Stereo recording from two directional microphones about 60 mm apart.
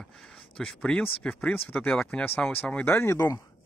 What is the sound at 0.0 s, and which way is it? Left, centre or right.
Speech, centre.